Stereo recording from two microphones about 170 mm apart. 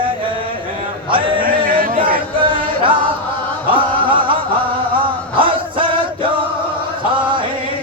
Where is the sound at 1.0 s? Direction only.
30° right (ahead or behind).